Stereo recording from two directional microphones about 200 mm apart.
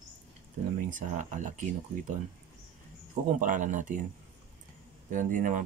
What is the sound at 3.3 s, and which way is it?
Speech, 40° right (ahead or behind).